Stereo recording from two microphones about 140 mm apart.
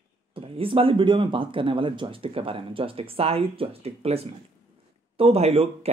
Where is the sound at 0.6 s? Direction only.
40° right (ahead or behind).